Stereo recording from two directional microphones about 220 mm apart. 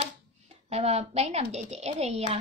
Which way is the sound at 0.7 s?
30° right (ahead or behind).